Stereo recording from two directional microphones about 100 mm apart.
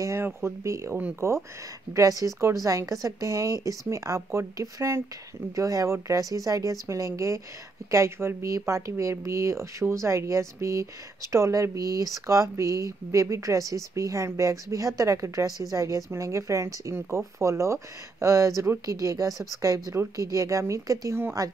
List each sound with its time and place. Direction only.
0.0 s speech: 25° right (ahead or behind)
2.0 s speech: 35° right (ahead or behind)